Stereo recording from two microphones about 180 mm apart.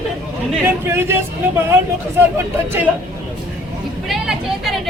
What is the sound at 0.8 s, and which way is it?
Speech, 15° right (ahead or behind).